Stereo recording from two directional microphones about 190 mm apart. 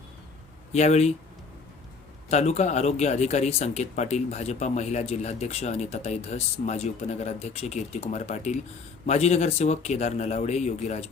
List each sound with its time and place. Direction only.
0.7 s speech: 35° left (ahead or behind)
2.3 s speech: 35° left (ahead or behind)